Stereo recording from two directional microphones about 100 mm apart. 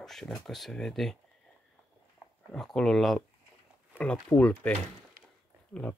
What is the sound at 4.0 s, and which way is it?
Speech, 15° left (ahead or behind).